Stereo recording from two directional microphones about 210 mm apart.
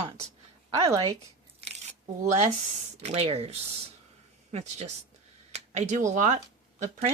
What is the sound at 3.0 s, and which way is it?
Speech, 30° right (ahead or behind).